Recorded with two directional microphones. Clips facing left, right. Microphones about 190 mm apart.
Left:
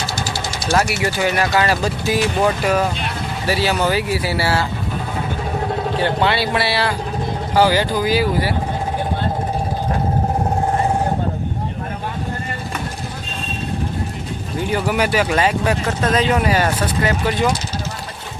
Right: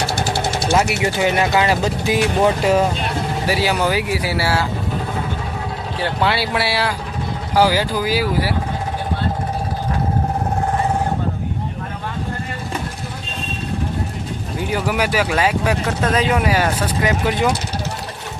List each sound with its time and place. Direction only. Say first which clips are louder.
0.0 s engine: right 4 dB; 60° right (ahead or behind)
0.7 s speech: left 1 dB; 20° right (ahead or behind)
3.4 s speech: left 1 dB; 10° right (ahead or behind)
6.0 s speech: even; 5° right (ahead or behind)
14.7 s speech: left 1 dB; 5° right (ahead or behind)